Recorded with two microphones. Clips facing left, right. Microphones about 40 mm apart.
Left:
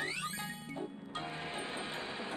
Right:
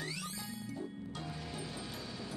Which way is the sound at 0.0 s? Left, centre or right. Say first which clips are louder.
Left 4 dB; left.